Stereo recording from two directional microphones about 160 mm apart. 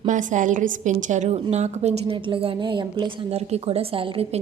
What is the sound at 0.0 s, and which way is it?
A woman's voice, 50° right (ahead or behind).